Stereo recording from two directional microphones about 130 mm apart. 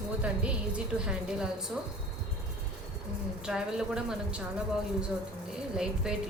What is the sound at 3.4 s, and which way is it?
Speech, 5° right (ahead or behind).